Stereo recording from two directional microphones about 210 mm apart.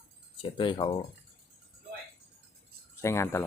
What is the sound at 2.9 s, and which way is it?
Speech, 15° left (ahead or behind).